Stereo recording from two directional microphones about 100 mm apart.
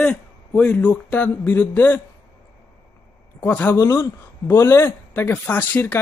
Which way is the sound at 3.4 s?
20° left (ahead or behind).